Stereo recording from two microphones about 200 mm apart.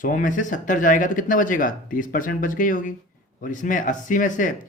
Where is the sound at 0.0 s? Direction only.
40° left (ahead or behind).